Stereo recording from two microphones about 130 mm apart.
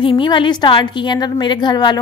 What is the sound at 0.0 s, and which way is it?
A woman's voice, 40° left (ahead or behind).